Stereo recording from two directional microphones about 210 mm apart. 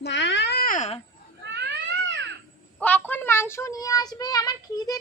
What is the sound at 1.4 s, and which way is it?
Cat, 55° right (ahead or behind).